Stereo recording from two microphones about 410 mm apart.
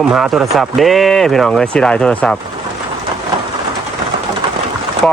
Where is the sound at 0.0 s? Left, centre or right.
Centre.